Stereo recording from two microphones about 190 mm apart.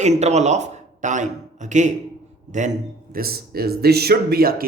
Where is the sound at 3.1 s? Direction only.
50° right (ahead or behind).